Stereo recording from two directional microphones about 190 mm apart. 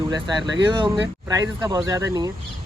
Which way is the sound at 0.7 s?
20° right (ahead or behind).